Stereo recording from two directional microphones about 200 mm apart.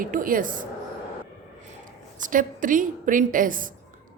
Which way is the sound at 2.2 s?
40° right (ahead or behind).